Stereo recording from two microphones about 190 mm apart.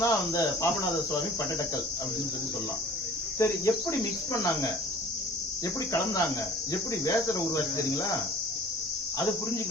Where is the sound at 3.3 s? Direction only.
15° left (ahead or behind).